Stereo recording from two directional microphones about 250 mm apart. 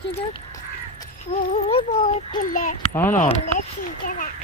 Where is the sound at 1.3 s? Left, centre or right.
Left.